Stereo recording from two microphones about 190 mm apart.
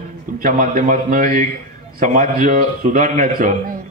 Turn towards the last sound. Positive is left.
turn(degrees=-35)  # may be behind; listen again after turning